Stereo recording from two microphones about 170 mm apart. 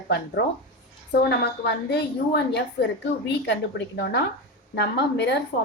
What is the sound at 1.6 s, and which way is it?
A woman's voice, 85° left.